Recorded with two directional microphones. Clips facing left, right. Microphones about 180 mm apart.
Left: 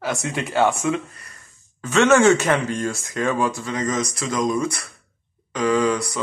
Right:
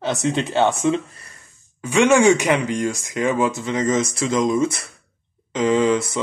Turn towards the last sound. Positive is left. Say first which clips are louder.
# right 2 dB
turn(degrees=-25)  # may be behind; listen again after turning